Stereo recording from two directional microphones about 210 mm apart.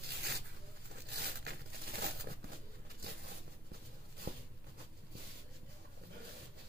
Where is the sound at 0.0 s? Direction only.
50° right (ahead or behind).